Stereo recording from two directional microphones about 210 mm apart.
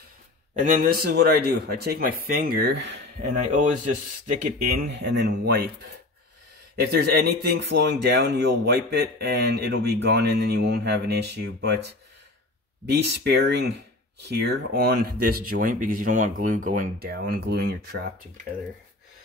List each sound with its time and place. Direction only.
0.6 s speech: 40° right (ahead or behind); by 3.0 s 55° right (ahead or behind)
3.2 s speech: 35° right (ahead or behind)
4.9 s speech: 55° right (ahead or behind)
13.0 s speech: 55° right (ahead or behind)